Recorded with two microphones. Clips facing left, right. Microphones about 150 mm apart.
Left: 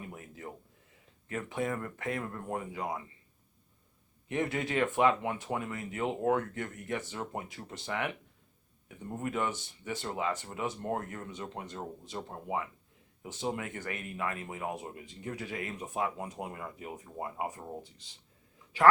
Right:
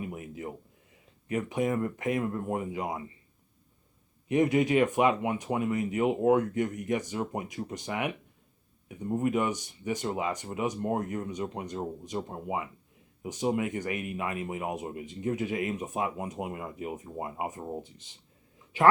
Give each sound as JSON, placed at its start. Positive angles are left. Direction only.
{"t": 0.0, "sound": "a sound", "side_deg": -15}
{"t": 1.3, "sound": "speech", "side_deg": -15}
{"t": 4.3, "sound": "speech", "side_deg": -15}